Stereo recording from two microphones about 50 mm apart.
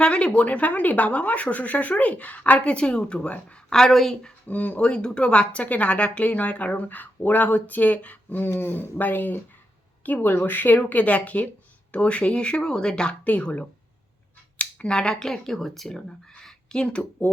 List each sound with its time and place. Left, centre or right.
0.0 s speech: left
3.7 s speech: centre
4.4 s speech: left
13.2 s speech: left
14.6 s speech: left
16.3 s a sound: centre